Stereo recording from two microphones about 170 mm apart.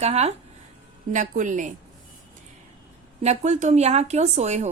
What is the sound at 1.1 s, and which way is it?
Speech, 50° right (ahead or behind).